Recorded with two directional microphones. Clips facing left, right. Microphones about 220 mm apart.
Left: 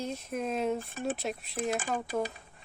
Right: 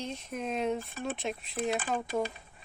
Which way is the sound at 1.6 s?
45° left (ahead or behind).